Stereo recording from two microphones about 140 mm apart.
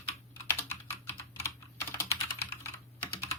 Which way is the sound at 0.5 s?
15° left (ahead or behind).